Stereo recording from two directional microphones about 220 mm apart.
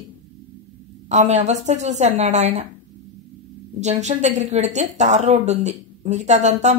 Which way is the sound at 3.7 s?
30° right (ahead or behind).